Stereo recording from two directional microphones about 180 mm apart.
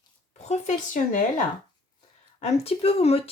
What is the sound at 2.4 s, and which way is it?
Speech, 35° left (ahead or behind).